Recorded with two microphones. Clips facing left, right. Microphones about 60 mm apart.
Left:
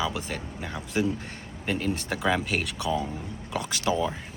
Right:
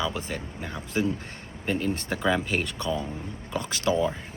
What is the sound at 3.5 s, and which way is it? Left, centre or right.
Speech, left.